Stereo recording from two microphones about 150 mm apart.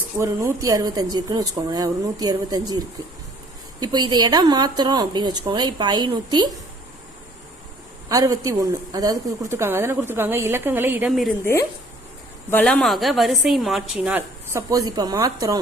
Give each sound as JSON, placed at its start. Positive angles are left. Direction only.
{"t": 0.2, "sound": "a woman's voice", "side_deg": -20}
{"t": 8.1, "sound": "a woman's voice", "side_deg": -25}
{"t": 11.1, "sound": "a woman's voice", "side_deg": 0}
{"t": 12.6, "sound": "a woman's voice", "side_deg": 5}
{"t": 14.7, "sound": "a woman's voice", "side_deg": -25}